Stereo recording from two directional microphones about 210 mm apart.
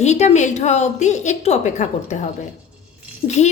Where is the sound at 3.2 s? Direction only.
35° left (ahead or behind).